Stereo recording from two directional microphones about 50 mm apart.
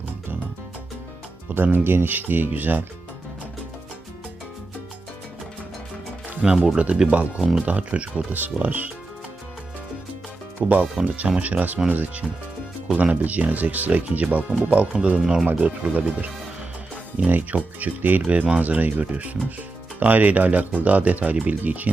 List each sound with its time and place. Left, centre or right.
1.5 s speech: right
6.4 s speech: centre
8.3 s speech: right
10.6 s speech: centre
11.3 s speech: right
15.4 s speech: right